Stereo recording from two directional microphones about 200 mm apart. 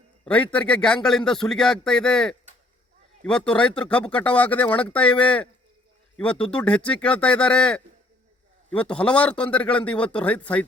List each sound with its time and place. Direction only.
0.3 s speech: 5° left (ahead or behind)